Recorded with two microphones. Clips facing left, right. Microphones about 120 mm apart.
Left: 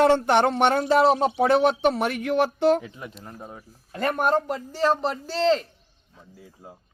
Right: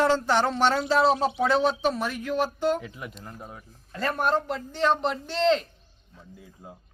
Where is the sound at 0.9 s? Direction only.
15° left (ahead or behind).